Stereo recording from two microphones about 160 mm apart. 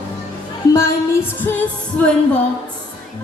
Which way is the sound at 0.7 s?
15° left (ahead or behind).